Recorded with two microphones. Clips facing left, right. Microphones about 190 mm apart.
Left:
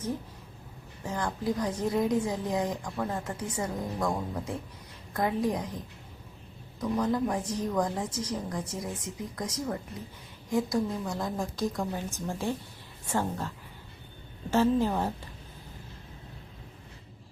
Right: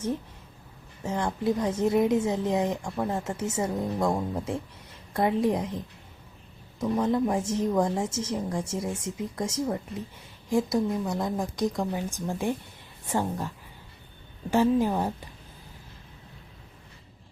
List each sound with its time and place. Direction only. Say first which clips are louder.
1.0 s a woman's voice: right 4 dB; 25° right (ahead or behind)
14.5 s a woman's voice: right 2 dB; 15° right (ahead or behind)